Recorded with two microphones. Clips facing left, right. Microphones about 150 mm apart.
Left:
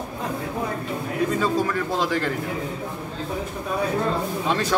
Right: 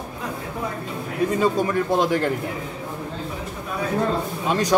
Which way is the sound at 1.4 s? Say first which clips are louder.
Right 2 dB; 20° right (ahead or behind).